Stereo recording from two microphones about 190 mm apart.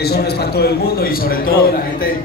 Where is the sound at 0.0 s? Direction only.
55° left (ahead or behind).